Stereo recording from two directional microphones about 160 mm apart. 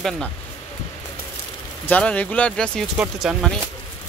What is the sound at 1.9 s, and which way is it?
Speech, 10° left (ahead or behind).